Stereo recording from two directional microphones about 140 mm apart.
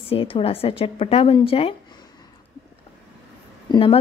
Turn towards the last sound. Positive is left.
turn(degrees=35)  # may be behind; listen again after turning